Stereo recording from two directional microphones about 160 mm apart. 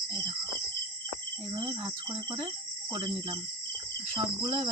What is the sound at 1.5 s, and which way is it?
Speech, 30° right (ahead or behind).